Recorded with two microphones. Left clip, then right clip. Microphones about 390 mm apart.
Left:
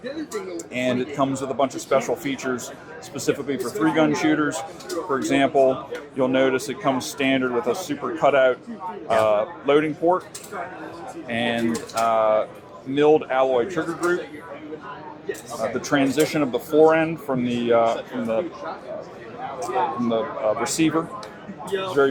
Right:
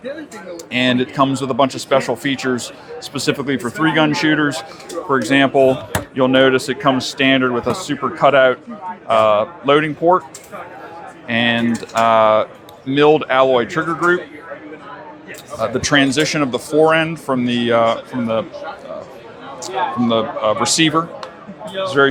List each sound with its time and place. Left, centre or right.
0.5 s speech: right
11.3 s speech: right
15.8 s speech: right
19.5 s speech: right